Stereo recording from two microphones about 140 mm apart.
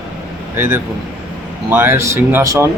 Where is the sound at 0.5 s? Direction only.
15° right (ahead or behind).